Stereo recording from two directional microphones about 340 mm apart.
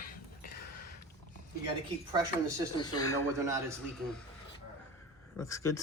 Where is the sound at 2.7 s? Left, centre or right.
Centre.